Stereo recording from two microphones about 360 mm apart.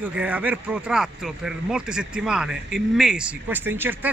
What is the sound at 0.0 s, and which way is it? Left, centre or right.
Speech, centre.